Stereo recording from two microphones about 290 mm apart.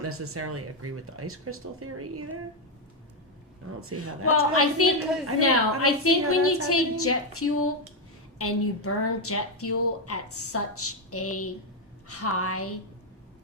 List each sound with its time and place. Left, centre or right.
0.0 s speech: right
3.8 s speech: right
4.5 s a woman's voice: left